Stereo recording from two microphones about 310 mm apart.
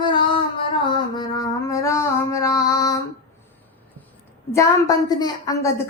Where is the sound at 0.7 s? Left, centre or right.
Centre.